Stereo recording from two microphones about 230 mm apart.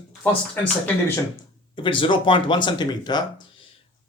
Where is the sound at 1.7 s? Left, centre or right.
Left.